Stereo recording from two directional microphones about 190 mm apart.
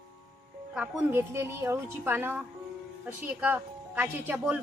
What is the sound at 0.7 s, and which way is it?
Speech, 5° right (ahead or behind).